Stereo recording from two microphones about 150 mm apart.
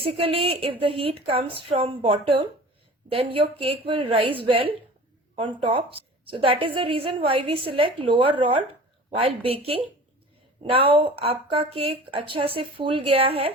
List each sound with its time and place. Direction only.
0.0 s a woman's voice: 40° right (ahead or behind)